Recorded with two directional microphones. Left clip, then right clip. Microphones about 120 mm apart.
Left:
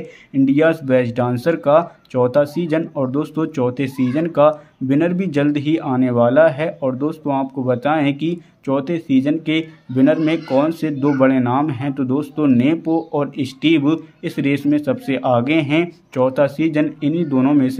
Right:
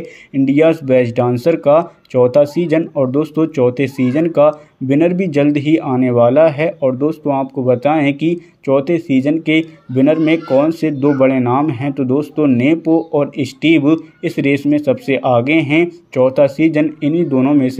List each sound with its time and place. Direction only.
0.5 s speech: 20° right (ahead or behind)